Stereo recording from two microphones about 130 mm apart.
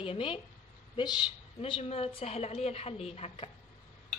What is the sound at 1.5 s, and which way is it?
A woman's voice, 45° left (ahead or behind).